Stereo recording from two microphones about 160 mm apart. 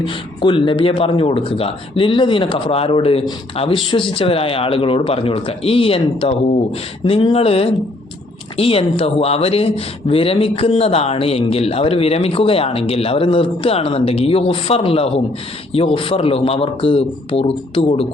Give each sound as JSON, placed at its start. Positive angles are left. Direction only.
{"t": 0.0, "sound": "speech", "side_deg": 30}